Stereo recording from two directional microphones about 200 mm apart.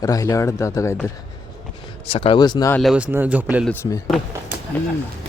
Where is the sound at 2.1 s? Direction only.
25° left (ahead or behind).